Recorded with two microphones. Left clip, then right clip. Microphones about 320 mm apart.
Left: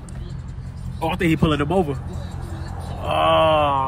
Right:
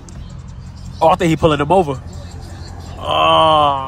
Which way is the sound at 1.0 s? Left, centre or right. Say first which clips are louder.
Right 9 dB; centre.